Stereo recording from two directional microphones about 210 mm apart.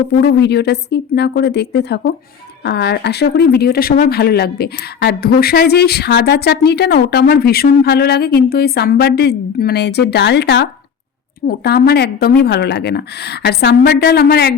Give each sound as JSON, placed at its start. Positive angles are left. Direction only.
{"t": 0.2, "sound": "speech", "side_deg": 55}